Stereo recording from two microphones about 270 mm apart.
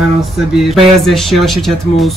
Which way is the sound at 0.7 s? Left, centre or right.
Centre.